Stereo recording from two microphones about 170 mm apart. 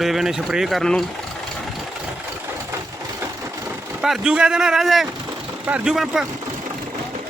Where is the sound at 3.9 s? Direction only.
5° right (ahead or behind).